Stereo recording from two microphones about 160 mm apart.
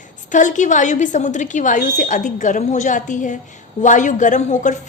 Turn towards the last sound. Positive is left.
turn(degrees=45)  # may be behind; listen again after turning